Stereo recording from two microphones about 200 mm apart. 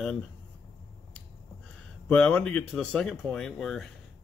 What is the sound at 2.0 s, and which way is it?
Speech, 5° left (ahead or behind).